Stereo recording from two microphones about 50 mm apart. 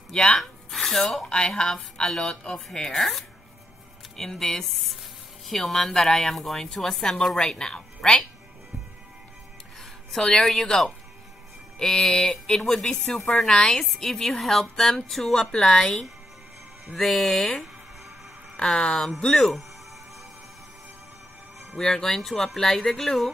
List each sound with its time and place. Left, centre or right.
0.1 s speech: centre
0.4 s a sound: centre
1.2 s a woman's voice: centre
10.1 s a woman's voice: centre
15.5 s a woman's voice: centre
18.6 s a woman's voice: centre
21.7 s a woman's voice: centre